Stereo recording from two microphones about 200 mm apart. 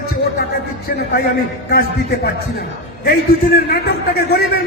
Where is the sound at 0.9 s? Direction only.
50° left (ahead or behind).